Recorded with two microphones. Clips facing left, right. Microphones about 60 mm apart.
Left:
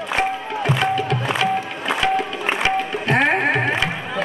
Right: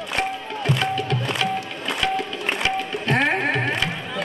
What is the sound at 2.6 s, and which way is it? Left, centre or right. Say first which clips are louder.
Music: left 4 dB; left.